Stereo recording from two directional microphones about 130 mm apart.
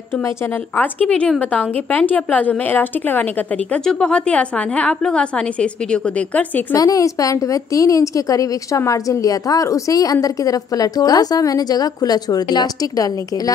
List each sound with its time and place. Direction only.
1.0 s a woman's voice: 10° left (ahead or behind)
6.8 s a woman's voice: 25° left (ahead or behind)